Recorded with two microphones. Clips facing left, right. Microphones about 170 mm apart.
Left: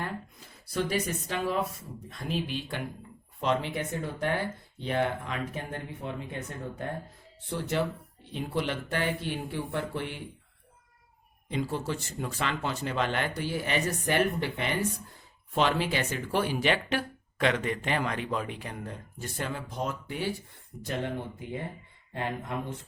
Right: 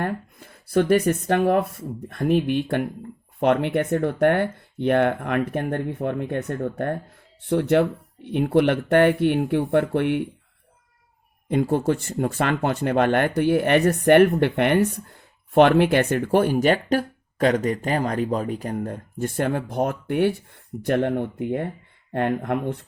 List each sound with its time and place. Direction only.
0.0 s speech: 60° right (ahead or behind)
11.4 s speech: 55° right (ahead or behind)